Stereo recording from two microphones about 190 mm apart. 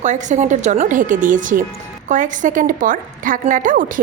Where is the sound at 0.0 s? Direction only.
40° right (ahead or behind).